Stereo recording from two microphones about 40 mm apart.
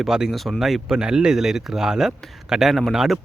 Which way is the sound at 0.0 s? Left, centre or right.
Centre.